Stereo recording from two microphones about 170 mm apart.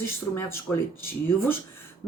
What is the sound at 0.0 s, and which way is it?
Speech, 15° left (ahead or behind).